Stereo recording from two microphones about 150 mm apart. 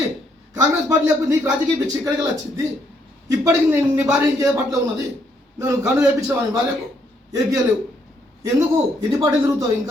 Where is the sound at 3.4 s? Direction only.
15° right (ahead or behind).